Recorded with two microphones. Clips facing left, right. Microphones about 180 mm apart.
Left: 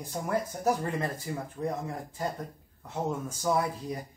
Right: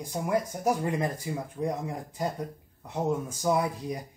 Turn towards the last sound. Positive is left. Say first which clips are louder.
# right 2 dB
turn(degrees=-15)  # may be behind; listen again after turning